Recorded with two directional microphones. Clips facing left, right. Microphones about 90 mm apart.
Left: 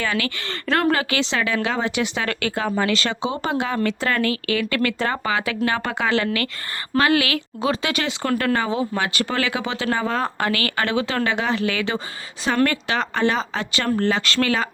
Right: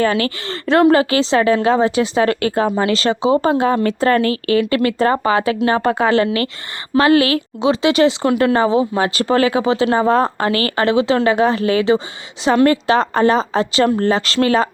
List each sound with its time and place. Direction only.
0.0 s a woman's voice: 35° right (ahead or behind)